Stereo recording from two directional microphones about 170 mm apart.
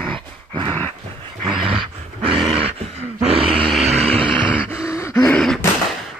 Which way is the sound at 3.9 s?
35° right (ahead or behind).